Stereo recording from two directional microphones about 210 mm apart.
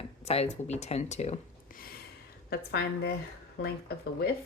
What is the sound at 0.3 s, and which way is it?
Speech, 30° left (ahead or behind).